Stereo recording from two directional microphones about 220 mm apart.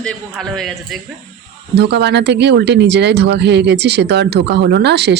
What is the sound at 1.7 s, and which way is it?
Speech, 50° right (ahead or behind).